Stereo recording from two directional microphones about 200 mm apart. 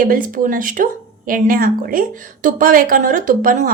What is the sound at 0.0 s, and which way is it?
Speech, 45° right (ahead or behind).